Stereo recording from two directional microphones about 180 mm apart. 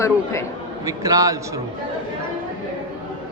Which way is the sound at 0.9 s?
20° right (ahead or behind).